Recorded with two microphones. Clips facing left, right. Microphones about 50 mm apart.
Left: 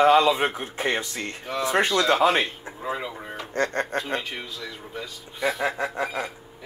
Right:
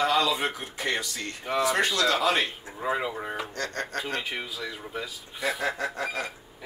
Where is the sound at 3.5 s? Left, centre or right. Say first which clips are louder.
Left 7 dB; left.